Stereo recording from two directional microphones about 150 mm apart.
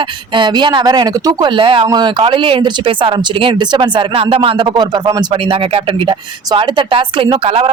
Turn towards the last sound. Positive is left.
turn(degrees=-40)  # may be behind; listen again after turning